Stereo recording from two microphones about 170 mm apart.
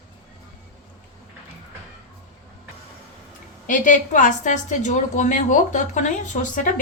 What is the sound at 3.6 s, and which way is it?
A woman's voice, 50° left (ahead or behind).